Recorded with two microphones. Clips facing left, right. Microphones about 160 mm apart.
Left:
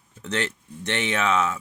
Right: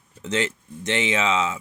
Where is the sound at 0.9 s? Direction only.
15° right (ahead or behind).